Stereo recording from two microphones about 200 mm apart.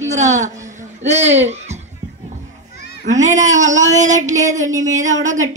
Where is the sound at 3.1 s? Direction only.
35° right (ahead or behind).